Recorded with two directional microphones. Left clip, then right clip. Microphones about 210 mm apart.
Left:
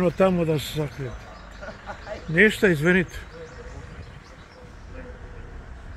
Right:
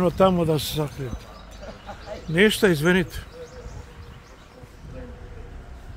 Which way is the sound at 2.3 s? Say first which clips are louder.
Even; 10° right (ahead or behind).